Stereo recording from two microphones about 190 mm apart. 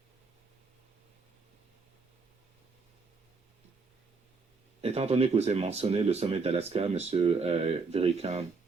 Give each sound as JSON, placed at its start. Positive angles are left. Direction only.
{"t": 4.8, "sound": "speech", "side_deg": -35}